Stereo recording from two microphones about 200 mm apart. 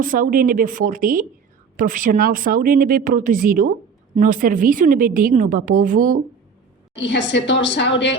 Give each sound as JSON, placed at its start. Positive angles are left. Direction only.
{"t": 0.0, "sound": "a woman's voice", "side_deg": -45}
{"t": 6.9, "sound": "a woman's voice", "side_deg": 60}